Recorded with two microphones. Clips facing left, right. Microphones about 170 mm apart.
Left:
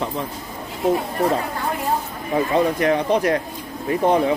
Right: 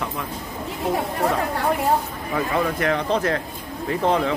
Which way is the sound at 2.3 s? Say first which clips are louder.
Left 4 dB; 20° left (ahead or behind).